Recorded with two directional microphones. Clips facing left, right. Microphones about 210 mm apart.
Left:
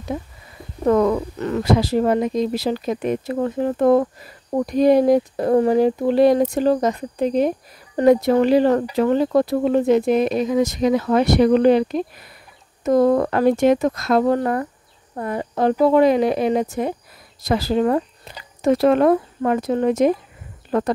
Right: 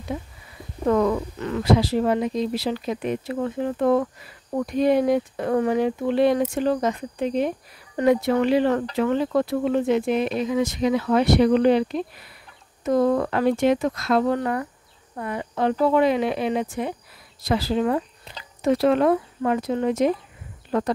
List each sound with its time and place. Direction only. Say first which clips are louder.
0.8 s speech: left 3 dB; 45° left (ahead or behind)